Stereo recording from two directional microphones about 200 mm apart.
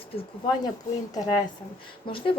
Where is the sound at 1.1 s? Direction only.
20° left (ahead or behind).